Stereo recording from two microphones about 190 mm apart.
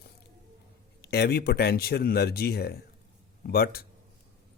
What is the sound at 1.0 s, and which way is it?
Speech, 60° left (ahead or behind).